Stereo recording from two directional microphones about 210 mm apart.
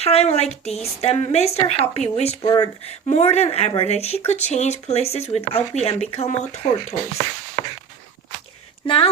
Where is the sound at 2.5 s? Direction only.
20° left (ahead or behind).